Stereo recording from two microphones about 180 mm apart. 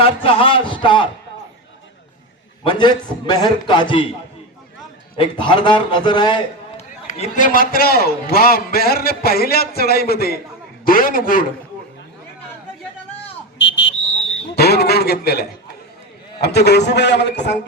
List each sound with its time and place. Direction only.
0.0 s speech: 30° left (ahead or behind)
2.6 s a man's voice: 25° left (ahead or behind)
5.1 s a man's voice: 30° left (ahead or behind)
7.1 s a man's voice: 45° left (ahead or behind)
13.6 s whistle: 90° left
14.5 s a man's voice: 60° left (ahead or behind)